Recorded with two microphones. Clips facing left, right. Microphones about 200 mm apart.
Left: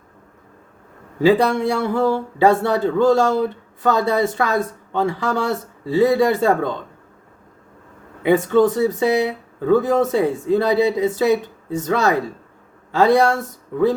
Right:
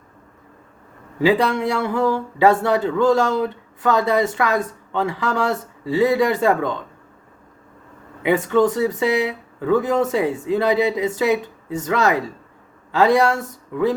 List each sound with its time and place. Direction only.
1.2 s speech: 30° left (ahead or behind)
8.2 s speech: 35° left (ahead or behind)